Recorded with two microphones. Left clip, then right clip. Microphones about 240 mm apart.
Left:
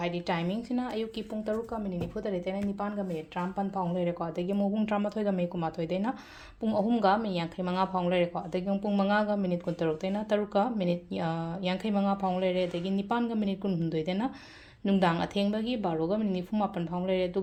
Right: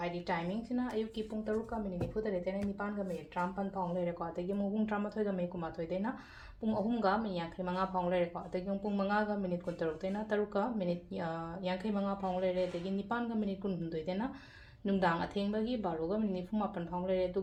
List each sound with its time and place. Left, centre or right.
0.0 s speech: left
3.3 s speech: left